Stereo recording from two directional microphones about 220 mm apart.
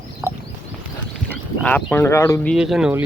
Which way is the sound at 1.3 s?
5° left (ahead or behind).